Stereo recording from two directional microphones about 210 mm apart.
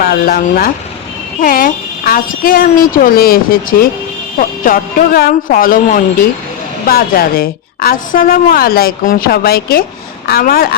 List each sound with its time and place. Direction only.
0.0 s a woman's voice: 45° left (ahead or behind)